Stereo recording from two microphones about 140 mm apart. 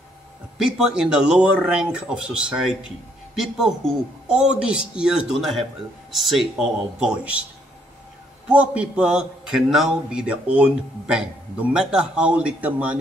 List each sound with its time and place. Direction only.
0.6 s speech: 5° right (ahead or behind)
8.5 s a man's voice: 10° right (ahead or behind)